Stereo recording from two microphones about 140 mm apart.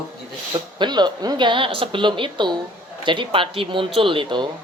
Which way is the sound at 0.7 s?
30° right (ahead or behind).